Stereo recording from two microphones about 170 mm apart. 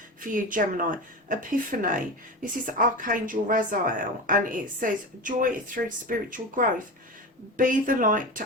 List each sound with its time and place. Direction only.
0.2 s a woman's voice: 50° right (ahead or behind)